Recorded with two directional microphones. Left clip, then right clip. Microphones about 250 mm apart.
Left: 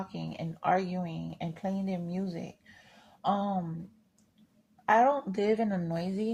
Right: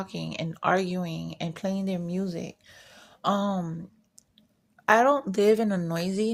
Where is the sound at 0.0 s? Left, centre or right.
Right.